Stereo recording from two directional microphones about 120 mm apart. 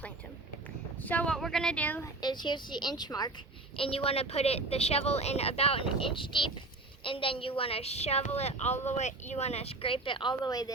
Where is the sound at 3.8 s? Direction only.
50° left (ahead or behind).